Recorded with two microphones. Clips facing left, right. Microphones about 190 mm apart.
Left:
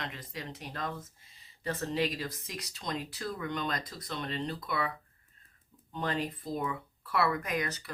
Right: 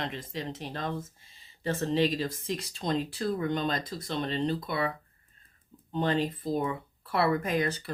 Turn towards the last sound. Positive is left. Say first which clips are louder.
# right 5 dB
turn(degrees=-30)  # may be behind; listen again after turning